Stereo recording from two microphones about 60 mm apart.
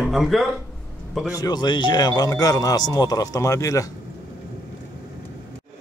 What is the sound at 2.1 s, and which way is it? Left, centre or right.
Speech, left.